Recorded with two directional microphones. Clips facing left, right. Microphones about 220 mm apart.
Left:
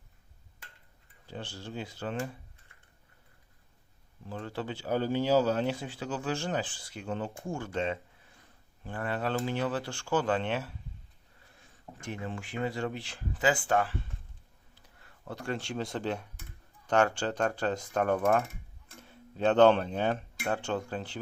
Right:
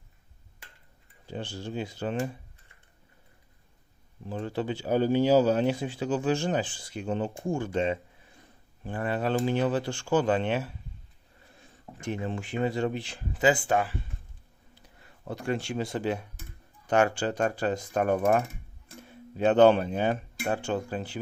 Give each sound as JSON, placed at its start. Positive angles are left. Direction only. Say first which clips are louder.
{"t": 1.3, "sound": "speech", "louder": "right 5 dB", "side_deg": -15}
{"t": 4.3, "sound": "speech", "louder": "right 6 dB", "side_deg": -15}
{"t": 11.9, "sound": "speech", "louder": "right 6 dB", "side_deg": -20}